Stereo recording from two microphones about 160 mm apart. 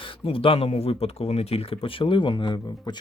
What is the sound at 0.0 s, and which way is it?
Speech, 35° left (ahead or behind).